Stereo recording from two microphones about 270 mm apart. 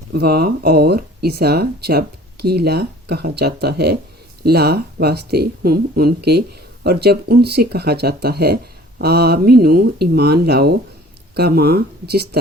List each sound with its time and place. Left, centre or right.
0.1 s speech: right